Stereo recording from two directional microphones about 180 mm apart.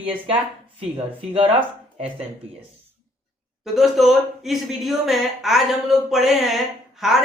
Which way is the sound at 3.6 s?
Centre (ahead or behind).